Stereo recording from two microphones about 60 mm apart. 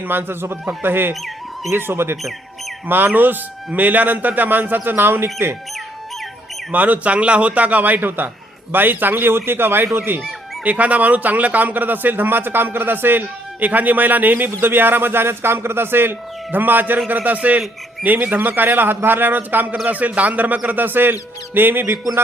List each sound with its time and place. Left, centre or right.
0.1 s speech: right
6.7 s speech: right
10.6 s speech: right